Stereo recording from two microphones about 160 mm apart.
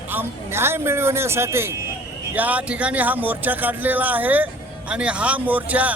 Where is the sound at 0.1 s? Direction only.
15° right (ahead or behind).